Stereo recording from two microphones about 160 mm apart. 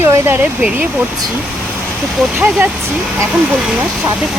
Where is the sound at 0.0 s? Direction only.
15° right (ahead or behind).